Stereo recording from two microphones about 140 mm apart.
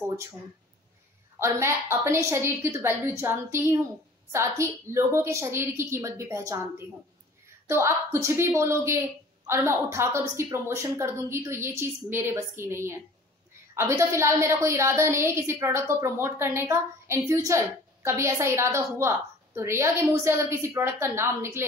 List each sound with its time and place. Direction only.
1.4 s a woman's voice: 20° right (ahead or behind)
7.6 s a woman's voice: 20° right (ahead or behind)